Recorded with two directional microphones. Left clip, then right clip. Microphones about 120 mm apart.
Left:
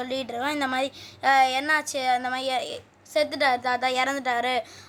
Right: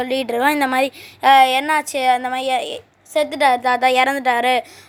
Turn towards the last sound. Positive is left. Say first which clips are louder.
# right 9 dB
turn(degrees=-45)  # may be behind; listen again after turning